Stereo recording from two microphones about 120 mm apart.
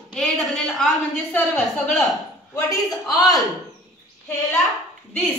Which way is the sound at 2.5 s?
30° left (ahead or behind).